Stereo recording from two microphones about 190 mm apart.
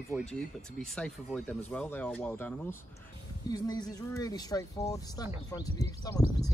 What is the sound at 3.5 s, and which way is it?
Speech, 20° left (ahead or behind).